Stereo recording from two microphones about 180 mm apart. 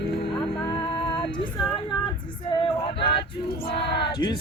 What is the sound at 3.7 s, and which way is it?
Speech, 70° left (ahead or behind).